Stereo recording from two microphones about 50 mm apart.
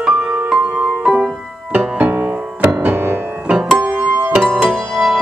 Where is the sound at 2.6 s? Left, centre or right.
Right.